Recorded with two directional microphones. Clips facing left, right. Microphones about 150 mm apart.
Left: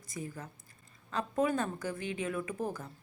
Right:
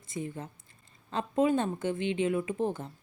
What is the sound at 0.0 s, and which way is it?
Speech, 25° right (ahead or behind).